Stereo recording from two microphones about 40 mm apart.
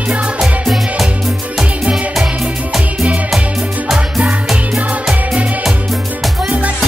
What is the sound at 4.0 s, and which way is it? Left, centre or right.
Music, right.